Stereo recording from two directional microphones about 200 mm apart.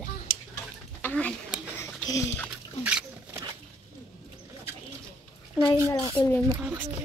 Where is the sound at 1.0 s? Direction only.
5° left (ahead or behind).